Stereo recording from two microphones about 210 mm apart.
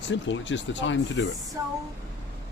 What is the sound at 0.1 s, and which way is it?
Speech, 60° left (ahead or behind).